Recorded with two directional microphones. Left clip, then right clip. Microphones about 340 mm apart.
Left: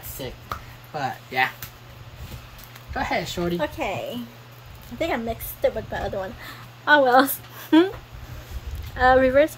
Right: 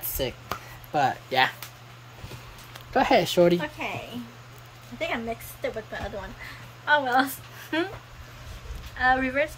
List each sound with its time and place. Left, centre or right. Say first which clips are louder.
0.2 s a sound: right 3 dB; right
2.9 s speech: right 5 dB; right
3.8 s a woman's voice: left 5 dB; left
5.0 s a woman's voice: left 4 dB; left
8.9 s a woman's voice: left 7 dB; centre